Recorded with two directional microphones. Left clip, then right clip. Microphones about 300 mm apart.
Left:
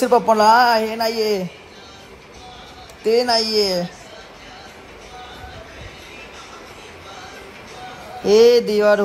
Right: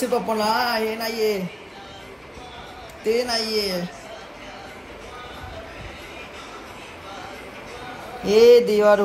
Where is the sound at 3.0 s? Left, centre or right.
Centre.